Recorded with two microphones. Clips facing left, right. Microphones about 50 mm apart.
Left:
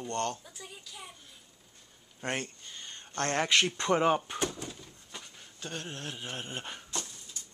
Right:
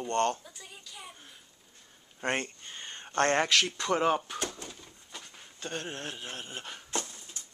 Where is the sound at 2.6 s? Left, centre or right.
Right.